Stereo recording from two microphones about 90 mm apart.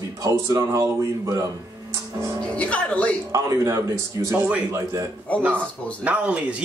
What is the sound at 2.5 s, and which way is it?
Speech, 15° left (ahead or behind).